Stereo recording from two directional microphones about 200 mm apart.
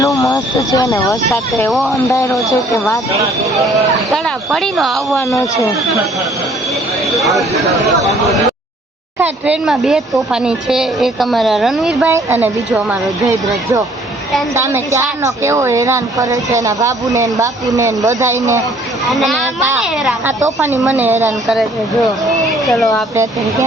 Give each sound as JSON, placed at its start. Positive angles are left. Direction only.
{"t": 0.0, "sound": "speech", "side_deg": 15}
{"t": 1.7, "sound": "speech", "side_deg": 0}
{"t": 2.0, "sound": "speech", "side_deg": 15}
{"t": 4.1, "sound": "speech", "side_deg": 0}
{"t": 5.1, "sound": "speech", "side_deg": 15}
{"t": 9.1, "sound": "speech", "side_deg": -10}
{"t": 12.0, "sound": "a woman's voice", "side_deg": -10}
{"t": 19.1, "sound": "a woman's voice", "side_deg": 0}
{"t": 23.1, "sound": "a woman's voice", "side_deg": -15}